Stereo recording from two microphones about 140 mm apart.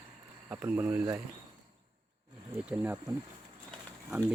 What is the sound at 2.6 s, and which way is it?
Speech, 10° right (ahead or behind).